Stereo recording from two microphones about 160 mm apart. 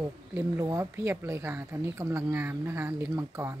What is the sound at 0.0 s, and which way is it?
Speech, 20° right (ahead or behind).